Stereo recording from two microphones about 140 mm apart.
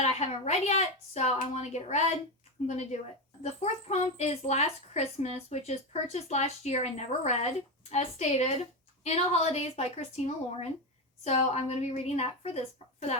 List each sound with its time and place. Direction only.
0.0 s a woman's voice: 50° left (ahead or behind)